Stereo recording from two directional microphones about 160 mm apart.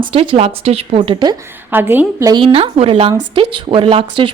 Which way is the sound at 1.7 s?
10° right (ahead or behind).